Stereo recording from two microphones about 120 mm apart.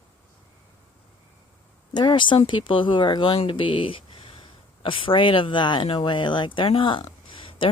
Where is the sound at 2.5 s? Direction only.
45° left (ahead or behind).